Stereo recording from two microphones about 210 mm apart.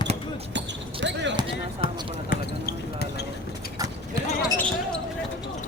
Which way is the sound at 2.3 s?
45° left (ahead or behind).